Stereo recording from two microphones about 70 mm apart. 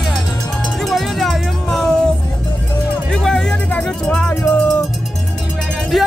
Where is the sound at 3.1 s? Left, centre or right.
Centre.